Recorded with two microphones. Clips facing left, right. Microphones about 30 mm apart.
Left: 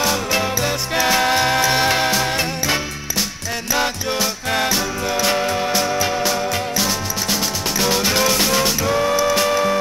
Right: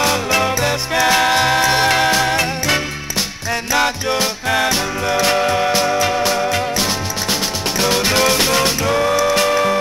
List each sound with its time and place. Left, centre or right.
0.0 s music: centre
1.3 s music: right
1.6 s music: centre
3.7 s music: right